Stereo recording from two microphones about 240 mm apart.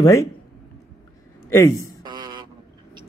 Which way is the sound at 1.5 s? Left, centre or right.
Centre.